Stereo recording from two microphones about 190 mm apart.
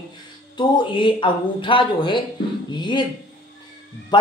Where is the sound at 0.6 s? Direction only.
25° left (ahead or behind).